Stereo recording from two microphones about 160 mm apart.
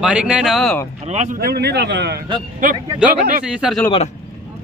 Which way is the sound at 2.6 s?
60° right (ahead or behind).